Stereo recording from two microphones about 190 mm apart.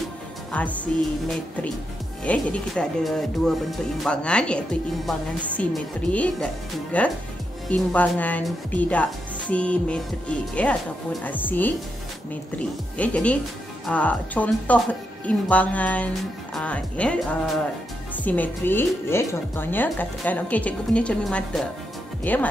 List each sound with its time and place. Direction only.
0.5 s speech: 5° left (ahead or behind)
2.2 s speech: 5° left (ahead or behind)